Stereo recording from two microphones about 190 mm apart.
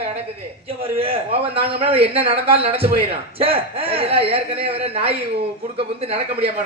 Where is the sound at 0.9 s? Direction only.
30° right (ahead or behind).